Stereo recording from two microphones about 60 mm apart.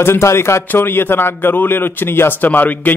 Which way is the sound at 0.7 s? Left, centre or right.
Left.